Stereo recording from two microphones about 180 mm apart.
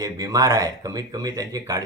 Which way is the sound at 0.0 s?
20° right (ahead or behind).